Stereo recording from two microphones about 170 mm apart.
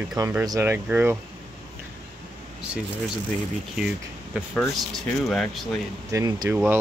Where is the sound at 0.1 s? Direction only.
15° right (ahead or behind).